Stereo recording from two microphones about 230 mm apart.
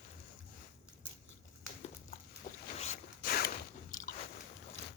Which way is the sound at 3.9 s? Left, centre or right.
Left.